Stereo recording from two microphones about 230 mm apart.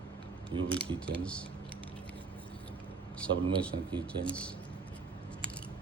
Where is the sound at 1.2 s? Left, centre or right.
Centre.